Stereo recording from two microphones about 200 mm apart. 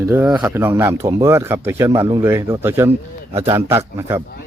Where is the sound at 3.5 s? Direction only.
15° right (ahead or behind).